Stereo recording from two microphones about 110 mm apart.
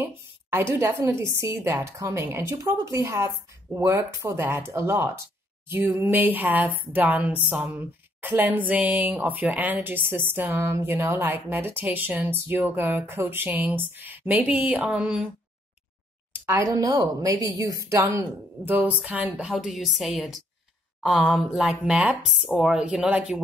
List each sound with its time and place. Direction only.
0.0 s a woman's voice: 20° right (ahead or behind)
16.3 s a sound: 20° right (ahead or behind)
16.6 s a woman's voice: 30° right (ahead or behind)
18.7 s speech: 15° right (ahead or behind)
19.5 s speech: centre (ahead or behind)